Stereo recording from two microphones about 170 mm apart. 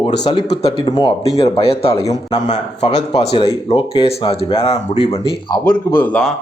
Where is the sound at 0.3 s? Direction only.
35° left (ahead or behind).